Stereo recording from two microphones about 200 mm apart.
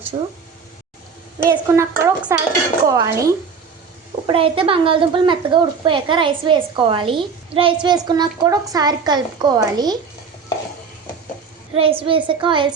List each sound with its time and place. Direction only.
0.1 s a woman's voice: 25° right (ahead or behind)
1.5 s speech: 15° right (ahead or behind)
4.3 s a woman's voice: 25° right (ahead or behind)
11.7 s a woman's voice: 30° right (ahead or behind)